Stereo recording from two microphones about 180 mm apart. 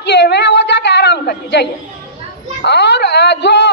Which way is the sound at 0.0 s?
70° left (ahead or behind).